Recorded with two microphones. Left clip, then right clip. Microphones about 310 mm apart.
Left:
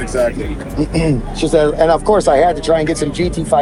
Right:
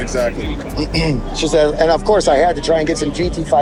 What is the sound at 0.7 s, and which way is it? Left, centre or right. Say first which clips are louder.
Speech: left 2 dB; left.